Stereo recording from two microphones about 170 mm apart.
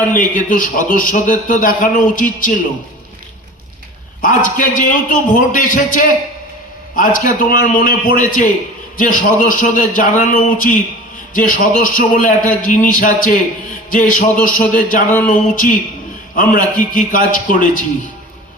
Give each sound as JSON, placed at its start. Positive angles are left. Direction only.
{"t": 0.1, "sound": "a man's voice", "side_deg": 50}
{"t": 4.2, "sound": "a man's voice", "side_deg": 50}